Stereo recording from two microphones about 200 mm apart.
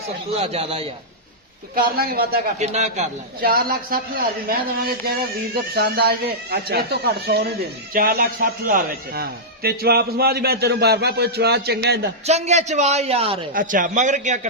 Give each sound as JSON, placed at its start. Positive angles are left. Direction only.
{"t": 0.3, "sound": "a man's voice", "side_deg": -30}
{"t": 1.7, "sound": "a man's voice", "side_deg": -50}
{"t": 2.6, "sound": "a man's voice", "side_deg": -35}
{"t": 12.2, "sound": "a woman's voice", "side_deg": -35}
{"t": 13.5, "sound": "a woman's voice", "side_deg": -45}